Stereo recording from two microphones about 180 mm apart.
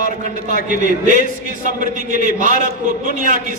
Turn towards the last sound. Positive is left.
turn(degrees=-45)  # may be behind; listen again after turning